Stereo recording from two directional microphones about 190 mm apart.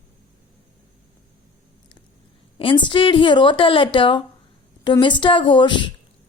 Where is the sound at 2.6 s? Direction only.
25° left (ahead or behind).